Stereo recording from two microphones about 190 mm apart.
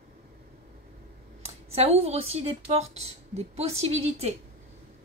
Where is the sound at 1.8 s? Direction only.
35° right (ahead or behind).